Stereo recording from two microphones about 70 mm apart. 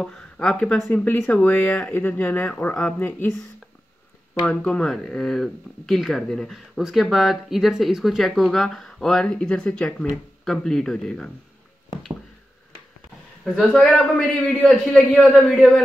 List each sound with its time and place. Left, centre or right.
0.0 s a man's voice: centre
0.9 s speech: left
4.5 s speech: centre
6.7 s a man's voice: centre
13.4 s a man's voice: centre